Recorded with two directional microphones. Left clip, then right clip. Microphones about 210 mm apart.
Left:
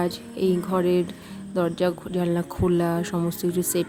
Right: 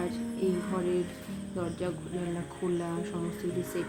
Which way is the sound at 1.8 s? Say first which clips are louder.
Left 10 dB; 55° left (ahead or behind).